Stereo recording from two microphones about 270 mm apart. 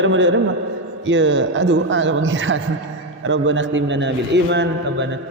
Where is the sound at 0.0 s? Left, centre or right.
Right.